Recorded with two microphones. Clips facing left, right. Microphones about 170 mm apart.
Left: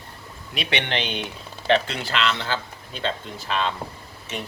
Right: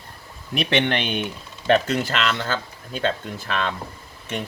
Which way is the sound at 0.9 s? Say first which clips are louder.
Right 3 dB; 50° right (ahead or behind).